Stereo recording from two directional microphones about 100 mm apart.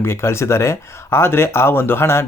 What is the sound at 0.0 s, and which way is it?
Speech, 25° left (ahead or behind).